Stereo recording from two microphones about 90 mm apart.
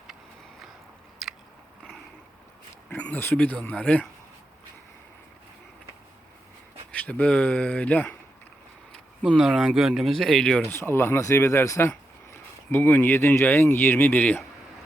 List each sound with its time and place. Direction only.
1.2 s biting: centre (ahead or behind)
2.9 s speech: 15° left (ahead or behind)
7.0 s speech: 15° left (ahead or behind)
9.4 s speech: 5° right (ahead or behind)
10.7 s speech: 25° left (ahead or behind)